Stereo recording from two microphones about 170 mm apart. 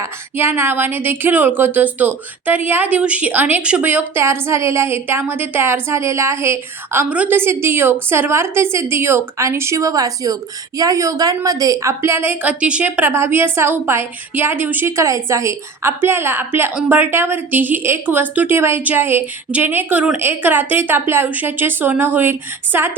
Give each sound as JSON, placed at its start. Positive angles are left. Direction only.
{"t": 0.0, "sound": "a woman's voice", "side_deg": -15}